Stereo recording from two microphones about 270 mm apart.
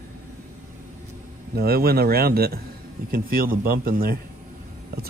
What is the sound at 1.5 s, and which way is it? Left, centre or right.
A man's voice, right.